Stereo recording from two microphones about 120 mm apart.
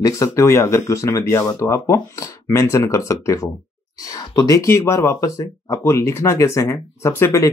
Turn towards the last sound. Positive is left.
turn(degrees=20)  # may be behind; listen again after turning